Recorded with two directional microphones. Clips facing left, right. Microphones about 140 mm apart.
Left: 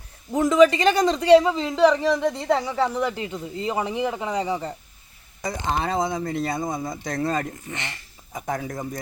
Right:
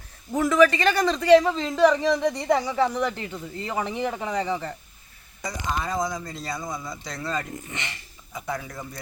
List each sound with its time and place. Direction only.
0.3 s a man's voice: 15° left (ahead or behind)
5.7 s a man's voice: 65° left (ahead or behind)
7.7 s speech: 15° right (ahead or behind)
8.3 s a man's voice: 45° left (ahead or behind)